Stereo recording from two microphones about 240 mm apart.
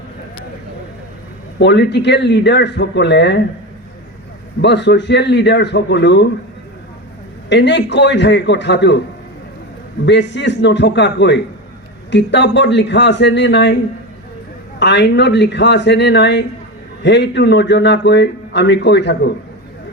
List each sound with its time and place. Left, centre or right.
1.5 s a man's voice: left
4.6 s a man's voice: left
7.5 s a man's voice: left
10.1 s a man's voice: left
14.8 s a man's voice: left